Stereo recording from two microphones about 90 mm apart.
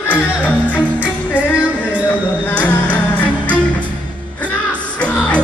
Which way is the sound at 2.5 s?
20° left (ahead or behind).